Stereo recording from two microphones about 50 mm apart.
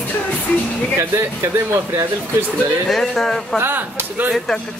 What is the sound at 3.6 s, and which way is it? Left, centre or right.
Speech, right.